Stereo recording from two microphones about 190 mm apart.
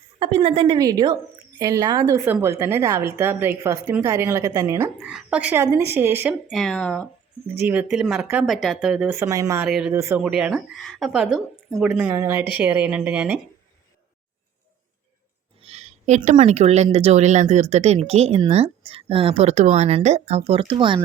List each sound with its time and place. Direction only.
0.2 s a woman's voice: 30° right (ahead or behind)
4.9 s speech: 5° right (ahead or behind)
7.5 s speech: 10° right (ahead or behind)
9.1 s speech: 15° right (ahead or behind)
9.6 s speech: centre (ahead or behind)
9.9 s speech: 15° right (ahead or behind)
10.2 s speech: 5° right (ahead or behind)
15.6 s speech: 35° right (ahead or behind)